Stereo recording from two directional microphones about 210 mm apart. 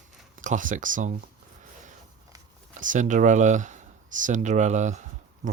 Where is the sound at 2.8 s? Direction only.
35° right (ahead or behind).